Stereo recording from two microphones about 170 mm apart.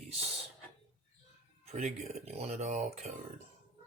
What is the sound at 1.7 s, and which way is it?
Speech, 40° right (ahead or behind).